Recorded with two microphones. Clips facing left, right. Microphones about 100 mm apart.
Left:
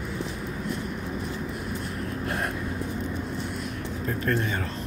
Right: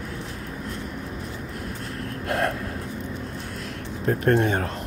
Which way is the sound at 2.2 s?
65° right (ahead or behind).